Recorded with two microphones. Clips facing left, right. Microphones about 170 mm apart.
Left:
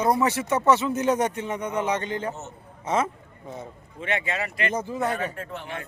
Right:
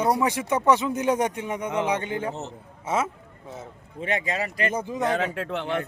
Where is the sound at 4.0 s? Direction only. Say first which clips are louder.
Right 1 dB; 35° right (ahead or behind).